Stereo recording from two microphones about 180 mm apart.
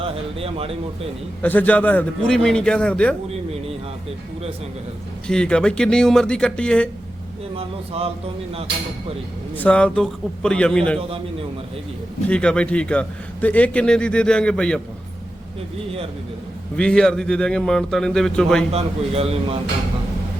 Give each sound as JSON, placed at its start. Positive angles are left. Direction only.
{"t": 0.0, "sound": "speech", "side_deg": -30}
{"t": 1.4, "sound": "a man's voice", "side_deg": 10}
{"t": 5.3, "sound": "a man's voice", "side_deg": 5}
{"t": 7.5, "sound": "a man's voice", "side_deg": -35}
{"t": 9.6, "sound": "a man's voice", "side_deg": 5}
{"t": 12.3, "sound": "a man's voice", "side_deg": 5}
{"t": 16.7, "sound": "a man's voice", "side_deg": 5}
{"t": 18.7, "sound": "a man's voice", "side_deg": -35}